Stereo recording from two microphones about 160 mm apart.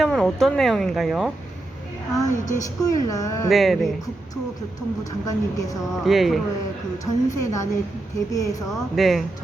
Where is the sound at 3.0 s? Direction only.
20° left (ahead or behind).